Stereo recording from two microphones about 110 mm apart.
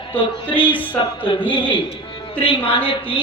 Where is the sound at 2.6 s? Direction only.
50° left (ahead or behind).